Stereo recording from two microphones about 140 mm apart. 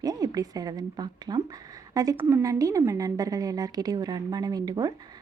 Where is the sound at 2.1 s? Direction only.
15° right (ahead or behind).